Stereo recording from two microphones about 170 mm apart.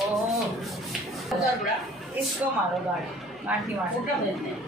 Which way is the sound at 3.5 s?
10° right (ahead or behind).